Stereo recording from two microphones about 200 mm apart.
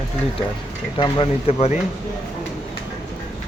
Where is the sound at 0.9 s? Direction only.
25° left (ahead or behind).